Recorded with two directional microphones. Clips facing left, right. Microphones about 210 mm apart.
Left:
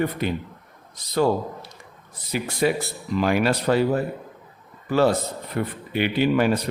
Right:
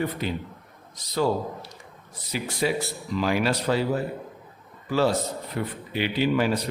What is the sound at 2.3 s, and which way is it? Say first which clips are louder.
A man's voice: left 3 dB; 55° left (ahead or behind).